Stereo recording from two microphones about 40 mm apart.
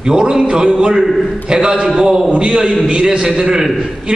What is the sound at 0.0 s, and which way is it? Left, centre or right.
A man's voice, centre.